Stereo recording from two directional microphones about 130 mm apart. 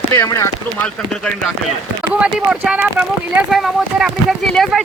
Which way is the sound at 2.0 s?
10° right (ahead or behind).